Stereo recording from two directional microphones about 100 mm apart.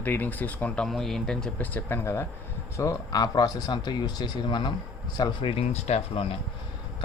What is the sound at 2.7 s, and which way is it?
Speech, 30° left (ahead or behind).